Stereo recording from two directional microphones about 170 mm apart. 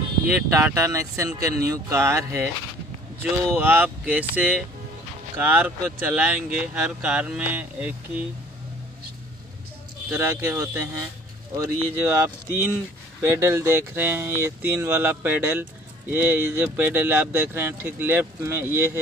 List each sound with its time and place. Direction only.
0.3 s speech: 10° right (ahead or behind)
3.5 s speech: 10° right (ahead or behind)
10.0 s speech: 15° right (ahead or behind)